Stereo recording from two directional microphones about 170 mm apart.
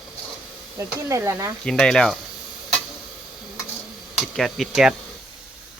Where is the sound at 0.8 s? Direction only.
20° right (ahead or behind).